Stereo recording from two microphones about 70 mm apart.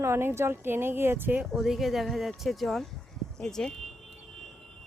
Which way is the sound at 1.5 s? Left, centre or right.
Centre.